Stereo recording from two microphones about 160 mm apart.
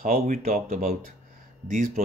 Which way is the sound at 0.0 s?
50° right (ahead or behind).